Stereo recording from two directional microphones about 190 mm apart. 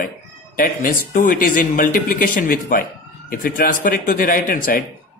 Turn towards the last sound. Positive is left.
turn(degrees=45)  # may be behind; listen again after turning